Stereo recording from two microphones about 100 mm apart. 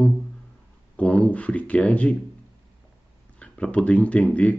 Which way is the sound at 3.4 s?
10° left (ahead or behind).